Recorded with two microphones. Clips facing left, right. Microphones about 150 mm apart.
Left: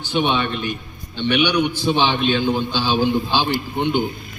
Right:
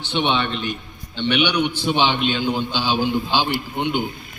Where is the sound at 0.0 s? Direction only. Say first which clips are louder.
Left 1 dB; 10° left (ahead or behind).